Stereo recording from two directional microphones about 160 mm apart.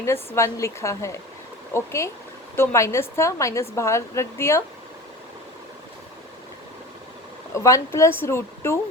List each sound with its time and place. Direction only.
0.3 s a woman's voice: 20° left (ahead or behind)
7.5 s a woman's voice: 20° left (ahead or behind)